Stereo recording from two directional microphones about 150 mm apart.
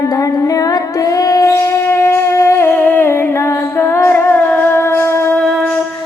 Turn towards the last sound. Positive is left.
turn(degrees=15)  # may be behind; listen again after turning